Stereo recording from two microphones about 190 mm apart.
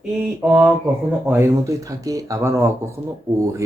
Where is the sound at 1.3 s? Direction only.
15° right (ahead or behind).